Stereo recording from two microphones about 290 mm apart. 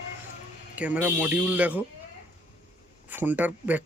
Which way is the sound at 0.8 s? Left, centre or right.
Centre.